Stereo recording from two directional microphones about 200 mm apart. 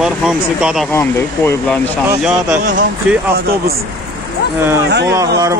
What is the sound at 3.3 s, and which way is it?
Speech, 50° right (ahead or behind).